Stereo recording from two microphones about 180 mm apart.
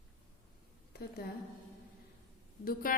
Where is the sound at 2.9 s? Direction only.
50° left (ahead or behind).